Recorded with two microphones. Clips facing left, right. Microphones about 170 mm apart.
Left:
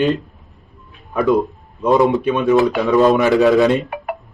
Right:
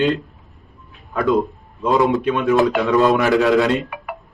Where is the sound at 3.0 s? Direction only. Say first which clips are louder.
Left 4 dB; 20° left (ahead or behind).